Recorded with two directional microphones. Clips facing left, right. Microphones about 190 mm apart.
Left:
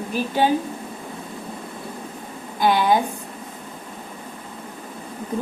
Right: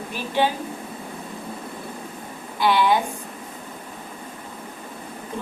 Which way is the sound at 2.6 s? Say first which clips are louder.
Left 1 dB; 45° left (ahead or behind).